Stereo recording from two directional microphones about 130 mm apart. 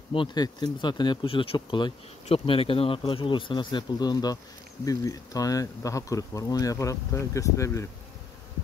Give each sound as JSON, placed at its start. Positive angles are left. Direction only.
{"t": 0.1, "sound": "speech", "side_deg": 35}